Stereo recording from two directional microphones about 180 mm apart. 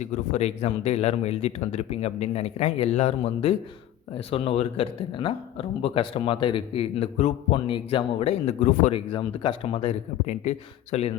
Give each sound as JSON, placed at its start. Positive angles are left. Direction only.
{"t": 0.0, "sound": "a man's voice", "side_deg": 40}
{"t": 9.1, "sound": "a man's voice", "side_deg": 25}